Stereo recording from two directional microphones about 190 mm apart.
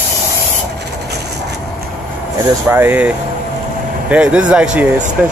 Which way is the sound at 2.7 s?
10° right (ahead or behind).